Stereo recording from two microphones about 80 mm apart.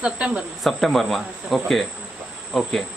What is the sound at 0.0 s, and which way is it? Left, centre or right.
Speech, centre.